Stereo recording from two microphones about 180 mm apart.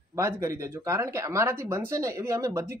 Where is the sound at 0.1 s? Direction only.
15° right (ahead or behind).